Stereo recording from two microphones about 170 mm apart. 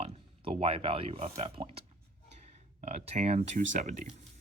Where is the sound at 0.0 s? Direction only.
35° right (ahead or behind).